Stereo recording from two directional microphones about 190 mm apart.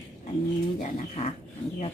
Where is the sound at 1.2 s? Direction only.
35° left (ahead or behind).